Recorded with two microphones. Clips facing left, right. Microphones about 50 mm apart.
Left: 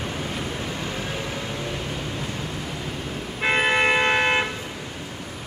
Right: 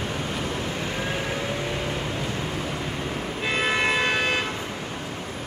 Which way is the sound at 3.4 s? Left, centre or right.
Left.